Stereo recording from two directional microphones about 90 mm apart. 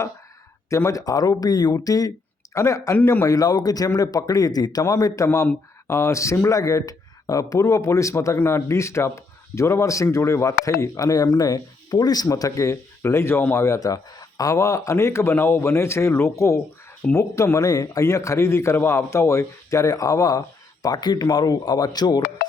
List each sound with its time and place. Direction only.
0.7 s speech: 35° left (ahead or behind)
3.0 s a man's voice: 25° left (ahead or behind)
3.2 s a man's voice: 45° left (ahead or behind)
20.8 s a man's voice: 50° left (ahead or behind)